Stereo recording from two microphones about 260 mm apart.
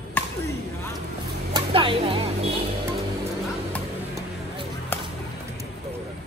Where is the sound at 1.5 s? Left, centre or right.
Centre.